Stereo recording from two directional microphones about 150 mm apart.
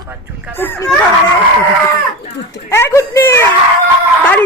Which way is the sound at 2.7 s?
20° left (ahead or behind).